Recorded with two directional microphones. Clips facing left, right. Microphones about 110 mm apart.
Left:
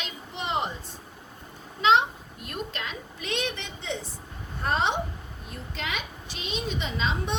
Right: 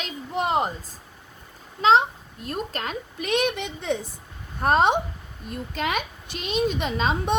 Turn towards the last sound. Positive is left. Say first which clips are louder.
# right 5 dB
turn(degrees=-50)  # may be behind; listen again after turning